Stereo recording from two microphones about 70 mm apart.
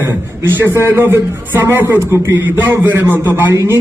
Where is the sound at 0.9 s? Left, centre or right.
Right.